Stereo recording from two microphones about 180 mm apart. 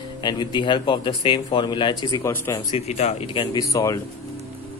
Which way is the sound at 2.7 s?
35° left (ahead or behind).